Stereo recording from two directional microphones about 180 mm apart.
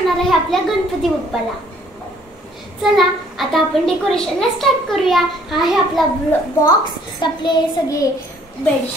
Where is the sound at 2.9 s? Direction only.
Centre (ahead or behind).